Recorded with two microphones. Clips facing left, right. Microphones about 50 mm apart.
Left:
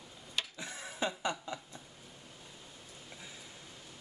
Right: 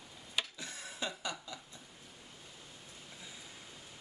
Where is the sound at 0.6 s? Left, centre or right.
Left.